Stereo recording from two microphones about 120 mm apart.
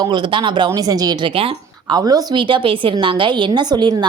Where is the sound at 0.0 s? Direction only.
40° right (ahead or behind).